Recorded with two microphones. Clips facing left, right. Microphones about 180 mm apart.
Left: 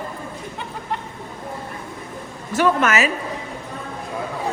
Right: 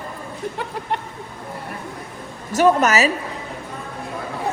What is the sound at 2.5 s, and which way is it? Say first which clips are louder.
Speech: right 3 dB; 40° right (ahead or behind).